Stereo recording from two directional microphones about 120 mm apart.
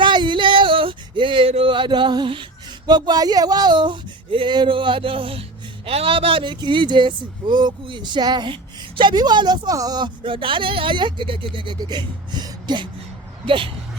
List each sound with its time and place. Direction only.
0.0 s male singing: 40° right (ahead or behind)
9.0 s a woman's voice: 40° right (ahead or behind)